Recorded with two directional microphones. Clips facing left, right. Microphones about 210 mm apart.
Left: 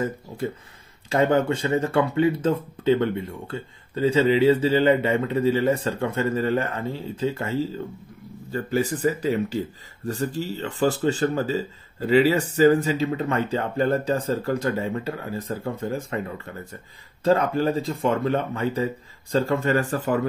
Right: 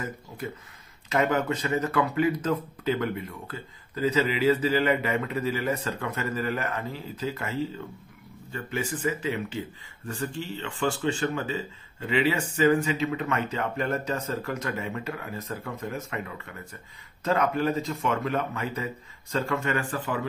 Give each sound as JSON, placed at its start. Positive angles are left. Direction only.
{"t": 1.0, "sound": "speech", "side_deg": 30}